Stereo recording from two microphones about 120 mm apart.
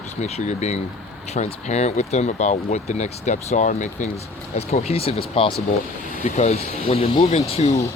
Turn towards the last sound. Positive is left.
turn(degrees=60)  # may be behind; listen again after turning